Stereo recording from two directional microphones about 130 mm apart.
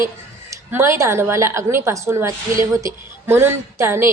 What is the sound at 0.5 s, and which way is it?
A woman's voice, 20° right (ahead or behind).